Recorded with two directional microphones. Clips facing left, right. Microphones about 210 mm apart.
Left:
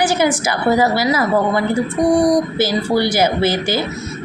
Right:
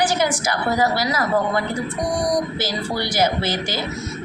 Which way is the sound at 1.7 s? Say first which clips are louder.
Left 9 dB; 55° left (ahead or behind).